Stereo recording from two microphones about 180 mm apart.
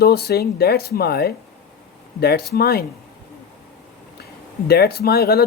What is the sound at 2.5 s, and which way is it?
Speech, 60° left (ahead or behind).